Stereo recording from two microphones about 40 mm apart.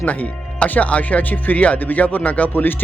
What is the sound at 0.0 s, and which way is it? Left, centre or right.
Speech, left.